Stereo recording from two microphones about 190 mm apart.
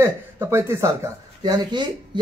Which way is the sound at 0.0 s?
15° right (ahead or behind).